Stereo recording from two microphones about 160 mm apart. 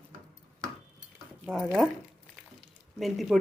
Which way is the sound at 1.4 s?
10° right (ahead or behind).